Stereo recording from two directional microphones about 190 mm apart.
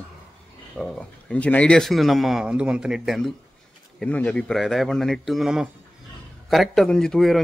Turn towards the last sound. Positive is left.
turn(degrees=0)  # may be behind; listen again after turning